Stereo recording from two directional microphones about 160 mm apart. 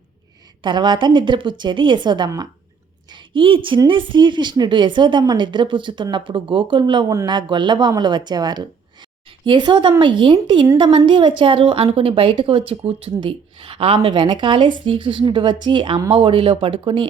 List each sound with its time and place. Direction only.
0.6 s a woman's voice: 30° right (ahead or behind)